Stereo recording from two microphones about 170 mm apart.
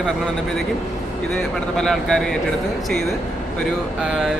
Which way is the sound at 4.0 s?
Centre (ahead or behind).